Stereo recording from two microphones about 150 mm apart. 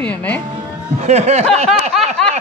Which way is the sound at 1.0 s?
45° right (ahead or behind).